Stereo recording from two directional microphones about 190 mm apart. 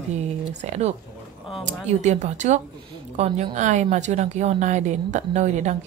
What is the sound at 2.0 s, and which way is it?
A woman's voice, 40° right (ahead or behind).